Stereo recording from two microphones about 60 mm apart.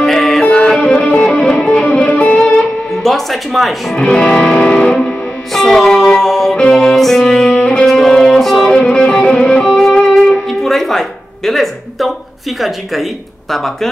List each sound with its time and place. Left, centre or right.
0.0 s music: centre
0.5 s music: centre
3.0 s speech: centre
3.9 s music: centre